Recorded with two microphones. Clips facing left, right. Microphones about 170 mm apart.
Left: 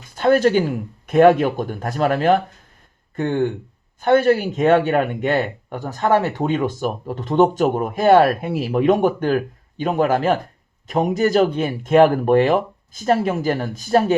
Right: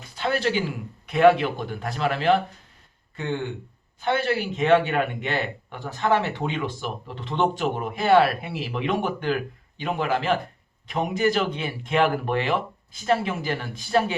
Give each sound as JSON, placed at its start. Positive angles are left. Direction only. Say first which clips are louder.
{"t": 0.2, "sound": "a man's voice", "louder": "left 9 dB", "side_deg": 45}